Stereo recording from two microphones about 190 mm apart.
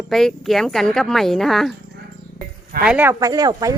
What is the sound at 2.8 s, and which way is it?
Speech, 5° right (ahead or behind).